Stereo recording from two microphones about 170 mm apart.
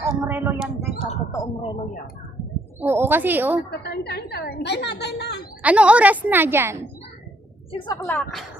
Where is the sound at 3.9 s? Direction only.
75° left (ahead or behind).